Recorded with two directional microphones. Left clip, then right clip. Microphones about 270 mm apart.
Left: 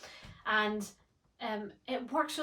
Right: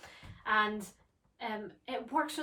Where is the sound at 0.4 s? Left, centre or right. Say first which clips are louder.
Right 1 dB; centre.